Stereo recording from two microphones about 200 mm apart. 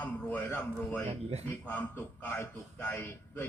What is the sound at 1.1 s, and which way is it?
Speech, 30° right (ahead or behind).